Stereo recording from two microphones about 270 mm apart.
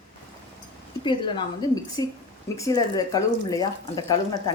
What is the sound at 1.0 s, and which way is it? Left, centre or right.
Speech, centre.